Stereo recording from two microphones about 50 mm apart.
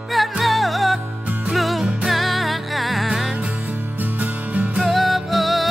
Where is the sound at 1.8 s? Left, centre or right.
Right.